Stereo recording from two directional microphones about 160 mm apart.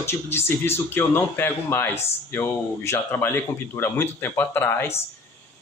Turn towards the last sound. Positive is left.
turn(degrees=15)  # may be behind; listen again after turning